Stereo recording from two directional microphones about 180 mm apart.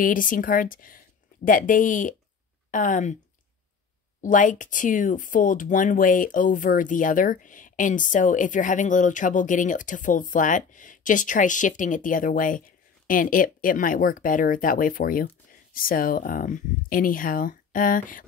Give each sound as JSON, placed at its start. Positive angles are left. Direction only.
{"t": 0.0, "sound": "speech", "side_deg": 50}
{"t": 4.2, "sound": "speech", "side_deg": 45}